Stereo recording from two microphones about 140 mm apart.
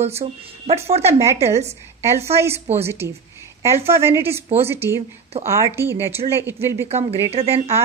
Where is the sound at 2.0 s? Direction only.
20° right (ahead or behind).